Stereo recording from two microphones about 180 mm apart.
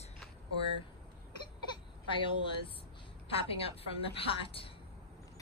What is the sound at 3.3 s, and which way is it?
A woman's voice, 30° left (ahead or behind).